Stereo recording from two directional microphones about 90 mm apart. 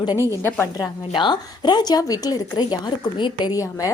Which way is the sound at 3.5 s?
40° left (ahead or behind).